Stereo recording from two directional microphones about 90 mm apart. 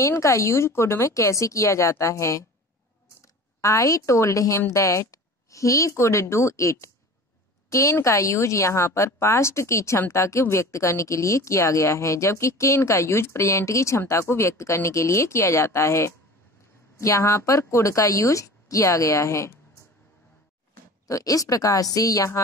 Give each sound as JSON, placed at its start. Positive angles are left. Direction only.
{"t": 0.0, "sound": "speech", "side_deg": 35}
{"t": 3.6, "sound": "speech", "side_deg": 40}
{"t": 21.1, "sound": "speech", "side_deg": 40}